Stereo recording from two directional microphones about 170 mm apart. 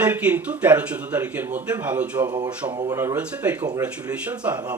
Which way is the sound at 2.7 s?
25° right (ahead or behind).